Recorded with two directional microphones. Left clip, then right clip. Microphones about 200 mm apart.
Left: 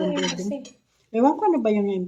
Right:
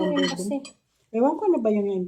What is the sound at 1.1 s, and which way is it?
Dishes, 5° right (ahead or behind).